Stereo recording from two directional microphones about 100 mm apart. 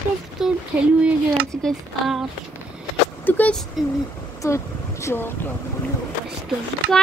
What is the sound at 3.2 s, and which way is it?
Speech, 20° left (ahead or behind).